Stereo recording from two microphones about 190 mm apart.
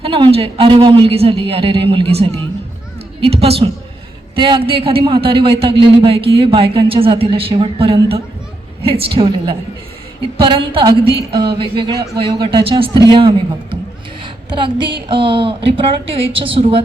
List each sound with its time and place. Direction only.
0.0 s a woman's voice: 30° right (ahead or behind)